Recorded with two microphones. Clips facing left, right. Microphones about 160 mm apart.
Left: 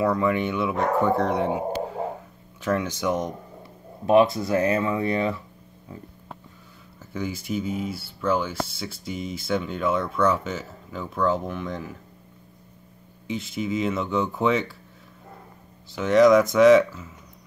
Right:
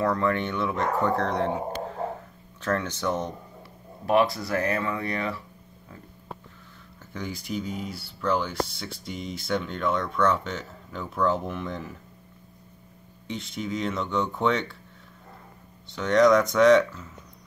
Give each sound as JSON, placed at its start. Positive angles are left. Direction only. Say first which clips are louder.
{"t": 0.0, "sound": "speech", "louder": "left 2 dB", "side_deg": 10}
{"t": 4.0, "sound": "speech", "louder": "left 4 dB", "side_deg": 20}
{"t": 7.2, "sound": "speech", "louder": "left 4 dB", "side_deg": 5}
{"t": 13.3, "sound": "speech", "louder": "left 4 dB", "side_deg": 5}
{"t": 15.9, "sound": "speech", "louder": "left 3 dB", "side_deg": 5}